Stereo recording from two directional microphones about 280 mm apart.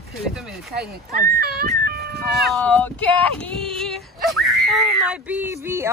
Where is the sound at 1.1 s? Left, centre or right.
Right.